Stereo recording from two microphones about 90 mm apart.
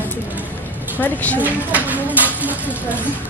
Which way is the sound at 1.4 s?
20° right (ahead or behind).